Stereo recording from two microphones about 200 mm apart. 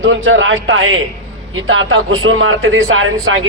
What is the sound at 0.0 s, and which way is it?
A man's voice, 75° right (ahead or behind).